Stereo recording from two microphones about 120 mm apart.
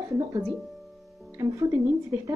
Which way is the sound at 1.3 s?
25° right (ahead or behind).